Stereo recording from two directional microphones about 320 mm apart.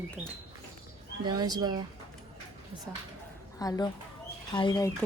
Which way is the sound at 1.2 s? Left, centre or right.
Centre.